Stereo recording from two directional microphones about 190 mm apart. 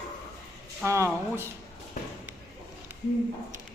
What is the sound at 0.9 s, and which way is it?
Speech, 15° right (ahead or behind).